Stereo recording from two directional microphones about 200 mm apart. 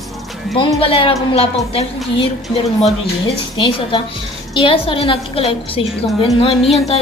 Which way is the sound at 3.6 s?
25° left (ahead or behind).